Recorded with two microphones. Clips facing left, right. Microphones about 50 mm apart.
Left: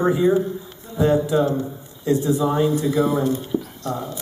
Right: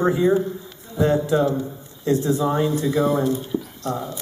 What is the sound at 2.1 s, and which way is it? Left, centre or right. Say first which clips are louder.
Speech: left 1 dB; centre.